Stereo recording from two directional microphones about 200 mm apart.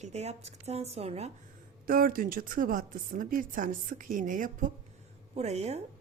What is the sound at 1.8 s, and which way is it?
A woman's voice, 45° right (ahead or behind).